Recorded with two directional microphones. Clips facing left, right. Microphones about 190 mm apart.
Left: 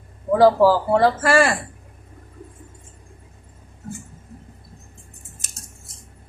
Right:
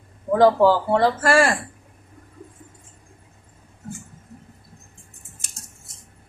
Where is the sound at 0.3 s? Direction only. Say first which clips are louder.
Left 1 dB; 5° left (ahead or behind).